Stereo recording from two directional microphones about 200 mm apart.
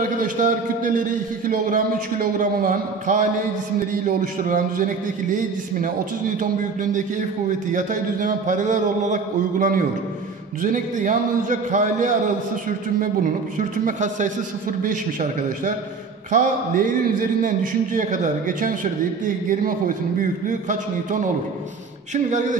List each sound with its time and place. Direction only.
0.0 s a man's voice: 40° right (ahead or behind)
2.3 s a man's voice: 40° right (ahead or behind)
16.3 s a man's voice: 40° right (ahead or behind)
17.9 s a man's voice: 40° right (ahead or behind)
20.2 s a man's voice: 40° right (ahead or behind)